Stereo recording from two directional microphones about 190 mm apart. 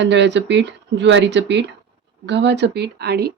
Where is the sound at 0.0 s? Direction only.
70° right (ahead or behind).